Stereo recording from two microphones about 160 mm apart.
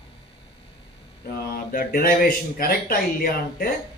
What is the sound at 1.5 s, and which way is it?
Speech, 65° left (ahead or behind).